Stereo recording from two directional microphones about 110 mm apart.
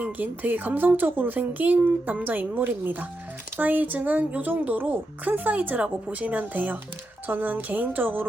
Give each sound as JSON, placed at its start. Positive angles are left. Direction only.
{"t": 0.0, "sound": "speech", "side_deg": -15}